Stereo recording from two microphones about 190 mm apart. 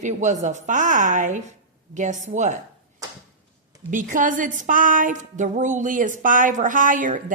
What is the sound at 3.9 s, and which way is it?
Speech, 45° right (ahead or behind).